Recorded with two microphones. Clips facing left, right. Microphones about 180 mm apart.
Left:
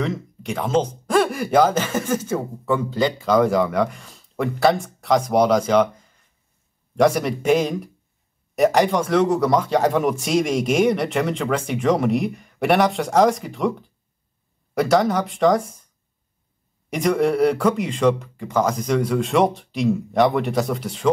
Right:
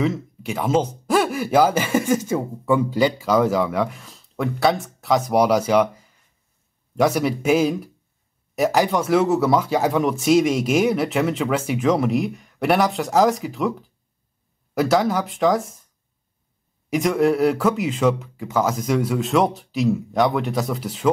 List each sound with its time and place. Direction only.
0.0 s speech: 5° right (ahead or behind)
16.9 s speech: centre (ahead or behind)